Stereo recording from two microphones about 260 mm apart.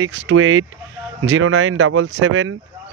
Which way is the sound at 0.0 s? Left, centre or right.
Right.